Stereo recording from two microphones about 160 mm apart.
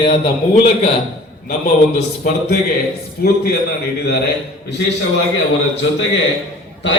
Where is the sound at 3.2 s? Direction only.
75° left (ahead or behind).